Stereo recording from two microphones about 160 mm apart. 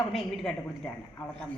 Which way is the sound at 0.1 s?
Centre (ahead or behind).